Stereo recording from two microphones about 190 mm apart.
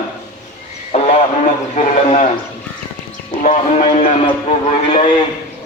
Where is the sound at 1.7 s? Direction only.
40° left (ahead or behind).